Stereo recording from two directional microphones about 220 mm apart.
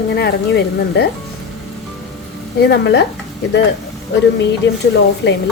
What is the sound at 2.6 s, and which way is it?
Speech, 50° left (ahead or behind).